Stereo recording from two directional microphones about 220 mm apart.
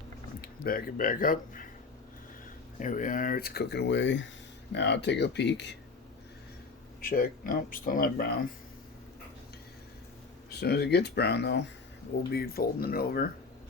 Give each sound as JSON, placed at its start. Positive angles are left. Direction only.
{"t": 0.4, "sound": "speech", "side_deg": 40}
{"t": 2.7, "sound": "speech", "side_deg": 35}
{"t": 7.0, "sound": "speech", "side_deg": 40}
{"t": 10.5, "sound": "speech", "side_deg": 50}